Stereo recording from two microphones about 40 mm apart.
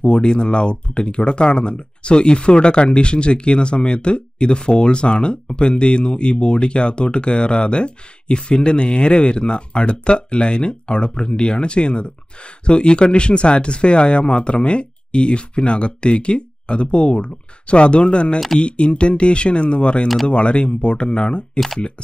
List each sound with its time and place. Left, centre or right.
0.0 s speech: left